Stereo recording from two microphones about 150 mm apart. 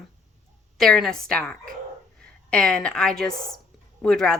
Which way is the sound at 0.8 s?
Centre (ahead or behind).